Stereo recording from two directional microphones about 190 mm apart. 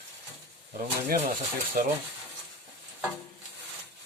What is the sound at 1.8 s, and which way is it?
Speech, 50° right (ahead or behind).